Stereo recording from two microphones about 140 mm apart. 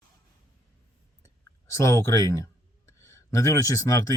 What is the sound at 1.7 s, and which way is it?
Speech, 20° left (ahead or behind).